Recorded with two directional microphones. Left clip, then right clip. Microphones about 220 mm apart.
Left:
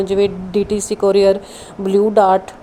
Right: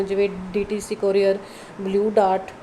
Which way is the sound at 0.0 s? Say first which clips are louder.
Left 6 dB; 30° left (ahead or behind).